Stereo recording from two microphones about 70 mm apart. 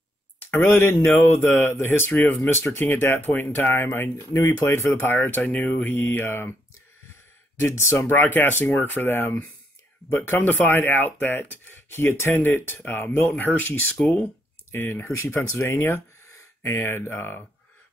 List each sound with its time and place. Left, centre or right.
0.4 s speech: left
2.2 s speech: centre
2.5 s speech: left
7.5 s speech: left
8.1 s speech: left